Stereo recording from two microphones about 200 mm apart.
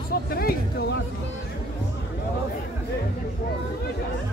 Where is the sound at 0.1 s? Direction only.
50° left (ahead or behind).